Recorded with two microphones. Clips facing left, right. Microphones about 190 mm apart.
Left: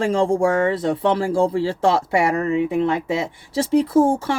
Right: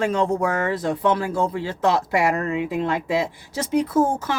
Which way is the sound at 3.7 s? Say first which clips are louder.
Left 4 dB; 30° left (ahead or behind).